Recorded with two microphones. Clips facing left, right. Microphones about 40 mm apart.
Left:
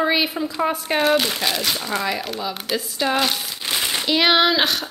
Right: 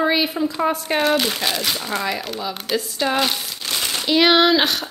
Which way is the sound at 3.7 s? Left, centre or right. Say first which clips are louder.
Left 1 dB; centre.